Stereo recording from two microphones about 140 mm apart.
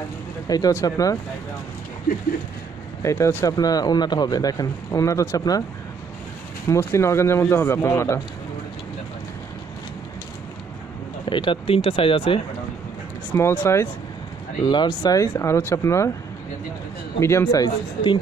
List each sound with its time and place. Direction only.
0.5 s speech: 25° left (ahead or behind)
3.0 s speech: 20° left (ahead or behind)
6.7 s speech: 20° left (ahead or behind)
11.2 s speech: 35° left (ahead or behind)
13.3 s speech: 15° left (ahead or behind)
14.6 s speech: 30° left (ahead or behind)
17.2 s speech: 20° left (ahead or behind)